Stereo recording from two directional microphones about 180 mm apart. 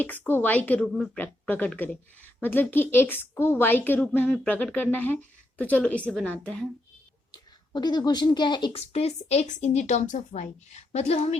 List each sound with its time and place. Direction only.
0.0 s a woman's voice: 10° left (ahead or behind)
7.3 s speech: 25° left (ahead or behind)